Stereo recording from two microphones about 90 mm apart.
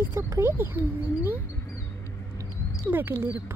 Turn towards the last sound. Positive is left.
turn(degrees=-25)  # may be behind; listen again after turning